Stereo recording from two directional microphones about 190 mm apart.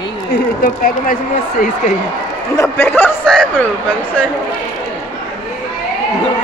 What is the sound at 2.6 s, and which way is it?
Speech, 10° left (ahead or behind).